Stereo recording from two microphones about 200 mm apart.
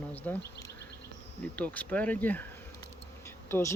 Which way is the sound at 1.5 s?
5° left (ahead or behind).